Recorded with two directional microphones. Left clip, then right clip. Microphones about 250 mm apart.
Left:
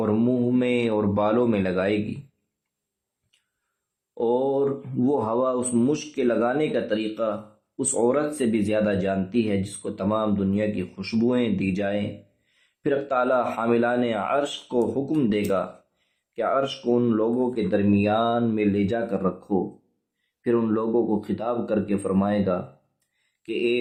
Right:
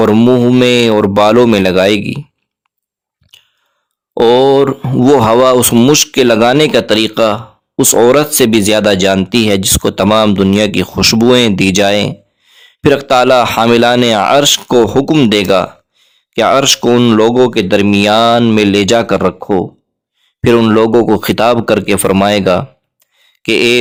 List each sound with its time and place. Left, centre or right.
0.0 s speech: right
4.1 s speech: right
20.4 s speech: right